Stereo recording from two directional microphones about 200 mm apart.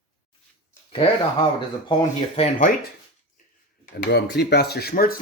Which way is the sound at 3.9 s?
50° left (ahead or behind).